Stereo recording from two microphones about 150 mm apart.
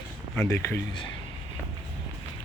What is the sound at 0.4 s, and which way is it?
Speech, 15° left (ahead or behind).